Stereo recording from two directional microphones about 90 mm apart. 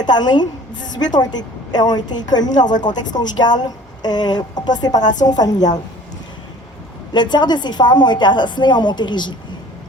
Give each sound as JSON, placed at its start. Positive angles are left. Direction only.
{"t": 0.0, "sound": "a woman's voice", "side_deg": 55}
{"t": 7.1, "sound": "a woman's voice", "side_deg": 55}